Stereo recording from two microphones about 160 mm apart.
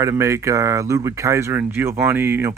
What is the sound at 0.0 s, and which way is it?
Speech, 20° right (ahead or behind).